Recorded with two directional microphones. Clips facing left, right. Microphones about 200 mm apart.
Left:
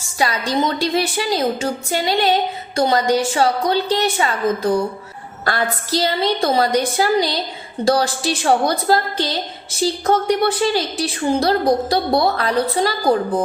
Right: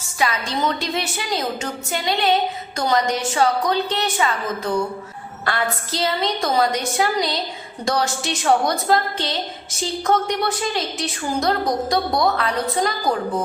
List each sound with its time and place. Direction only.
0.2 s a woman's voice: 35° left (ahead or behind)
5.9 s a woman's voice: 35° left (ahead or behind)